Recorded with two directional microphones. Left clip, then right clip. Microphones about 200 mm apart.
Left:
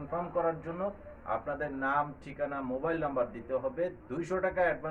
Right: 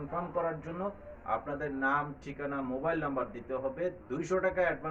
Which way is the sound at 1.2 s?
15° left (ahead or behind).